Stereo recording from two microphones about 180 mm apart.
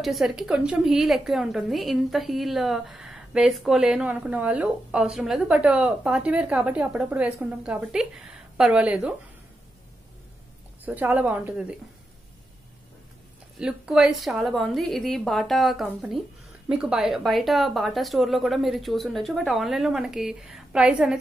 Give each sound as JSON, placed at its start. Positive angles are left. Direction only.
{"t": 0.0, "sound": "a woman's voice", "side_deg": 0}
{"t": 10.9, "sound": "a woman's voice", "side_deg": -10}
{"t": 13.6, "sound": "a woman's voice", "side_deg": -5}